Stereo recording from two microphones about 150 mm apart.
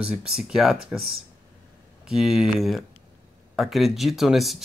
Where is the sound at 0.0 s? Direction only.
5° right (ahead or behind).